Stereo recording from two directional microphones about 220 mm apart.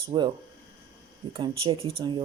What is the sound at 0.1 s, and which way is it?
Speech, 20° right (ahead or behind).